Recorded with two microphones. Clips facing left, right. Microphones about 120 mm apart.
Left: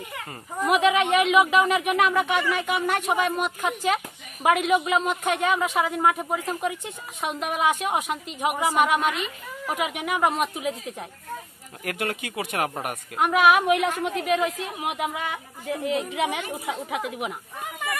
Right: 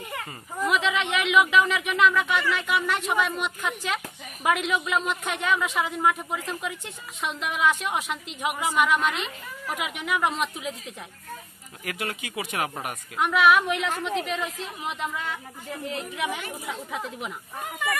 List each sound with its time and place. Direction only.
0.7 s speech: 50° left (ahead or behind)
11.8 s a woman's voice: 55° left (ahead or behind)
16.3 s speech: 15° left (ahead or behind)